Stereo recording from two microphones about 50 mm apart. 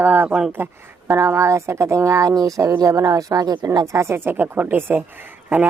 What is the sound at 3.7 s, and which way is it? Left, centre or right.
Speech, right.